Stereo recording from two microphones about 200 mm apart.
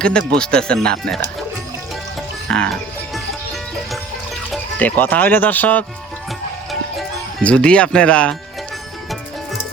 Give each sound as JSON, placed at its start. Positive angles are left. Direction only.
{"t": 0.0, "sound": "speech", "side_deg": 5}
{"t": 2.5, "sound": "speech", "side_deg": 5}
{"t": 4.5, "sound": "speech", "side_deg": 10}
{"t": 7.4, "sound": "speech", "side_deg": 5}